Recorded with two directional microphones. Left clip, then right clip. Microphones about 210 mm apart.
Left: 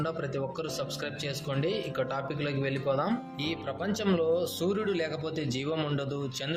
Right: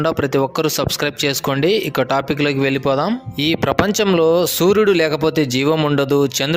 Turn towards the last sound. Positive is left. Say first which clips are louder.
# right 17 dB
turn(degrees=-50)  # may be behind; listen again after turning